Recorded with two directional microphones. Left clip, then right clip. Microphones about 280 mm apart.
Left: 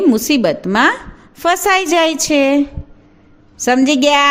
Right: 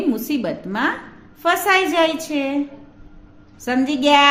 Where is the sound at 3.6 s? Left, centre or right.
Left.